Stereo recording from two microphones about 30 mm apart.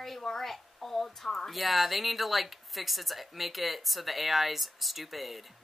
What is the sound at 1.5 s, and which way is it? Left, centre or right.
Speech, centre.